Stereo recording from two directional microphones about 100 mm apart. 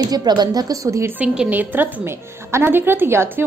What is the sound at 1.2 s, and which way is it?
A woman's voice, 15° right (ahead or behind).